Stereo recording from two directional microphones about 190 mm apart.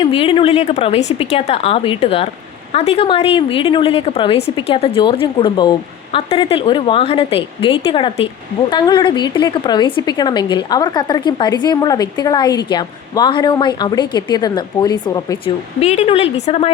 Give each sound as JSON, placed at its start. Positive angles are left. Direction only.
{"t": 0.0, "sound": "a woman's voice", "side_deg": 30}
{"t": 15.8, "sound": "a woman's voice", "side_deg": 35}